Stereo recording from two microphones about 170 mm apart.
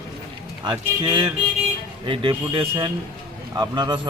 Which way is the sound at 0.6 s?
25° right (ahead or behind).